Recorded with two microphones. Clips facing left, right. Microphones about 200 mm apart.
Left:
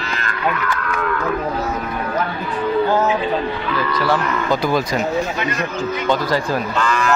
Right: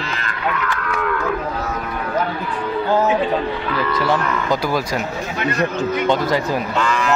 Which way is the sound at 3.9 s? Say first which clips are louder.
Left 1 dB; 20° right (ahead or behind).